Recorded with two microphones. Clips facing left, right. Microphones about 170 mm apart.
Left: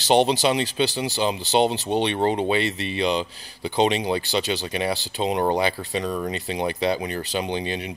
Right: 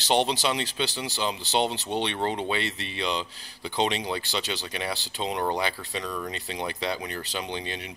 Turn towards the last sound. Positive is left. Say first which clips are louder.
# left 7 dB
turn(degrees=10)  # may be behind; listen again after turning